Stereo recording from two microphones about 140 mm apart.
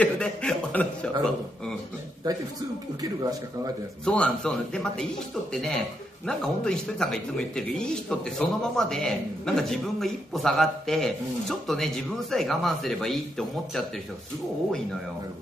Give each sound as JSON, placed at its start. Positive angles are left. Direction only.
{"t": 0.0, "sound": "chuckle", "side_deg": 5}
{"t": 2.3, "sound": "speech", "side_deg": -30}
{"t": 4.0, "sound": "a man's voice", "side_deg": 5}